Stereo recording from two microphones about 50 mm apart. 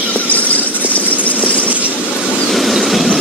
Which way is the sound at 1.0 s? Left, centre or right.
Left.